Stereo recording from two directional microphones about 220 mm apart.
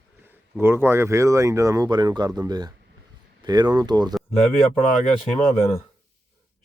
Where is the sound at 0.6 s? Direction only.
10° right (ahead or behind).